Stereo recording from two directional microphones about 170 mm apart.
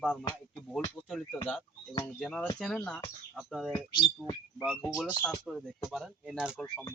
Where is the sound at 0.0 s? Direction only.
5° left (ahead or behind).